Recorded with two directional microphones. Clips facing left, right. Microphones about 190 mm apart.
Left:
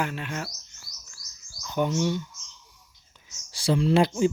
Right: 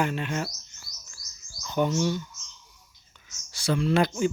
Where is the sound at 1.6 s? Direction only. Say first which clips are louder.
Even; 10° left (ahead or behind).